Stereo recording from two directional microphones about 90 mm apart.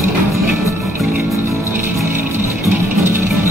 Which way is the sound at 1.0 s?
Centre (ahead or behind).